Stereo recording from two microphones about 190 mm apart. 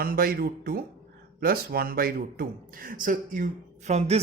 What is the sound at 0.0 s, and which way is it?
A man's voice, 50° right (ahead or behind).